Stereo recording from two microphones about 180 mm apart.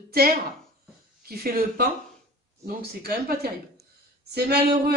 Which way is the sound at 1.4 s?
55° right (ahead or behind).